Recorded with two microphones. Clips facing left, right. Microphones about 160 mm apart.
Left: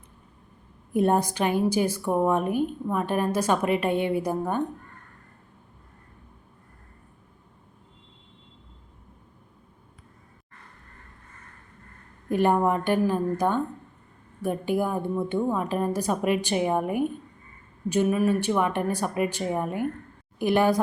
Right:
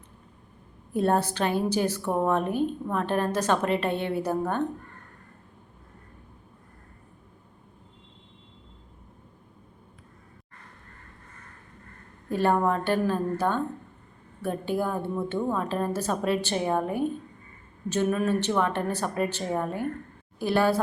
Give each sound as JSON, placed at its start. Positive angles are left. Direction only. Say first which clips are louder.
{"t": 0.9, "sound": "a woman's voice", "louder": "left 2 dB", "side_deg": 15}
{"t": 12.3, "sound": "a woman's voice", "louder": "left 2 dB", "side_deg": 15}